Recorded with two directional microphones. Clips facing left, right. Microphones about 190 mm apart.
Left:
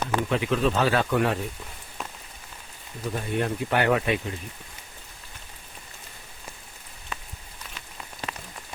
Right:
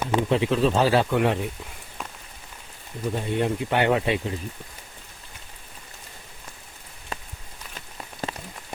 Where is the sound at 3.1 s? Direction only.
25° right (ahead or behind).